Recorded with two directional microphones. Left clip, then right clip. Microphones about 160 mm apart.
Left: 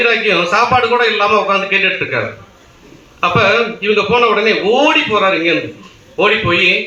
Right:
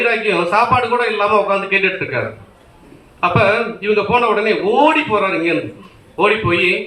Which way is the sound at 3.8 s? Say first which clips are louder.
Left 1 dB; 5° right (ahead or behind).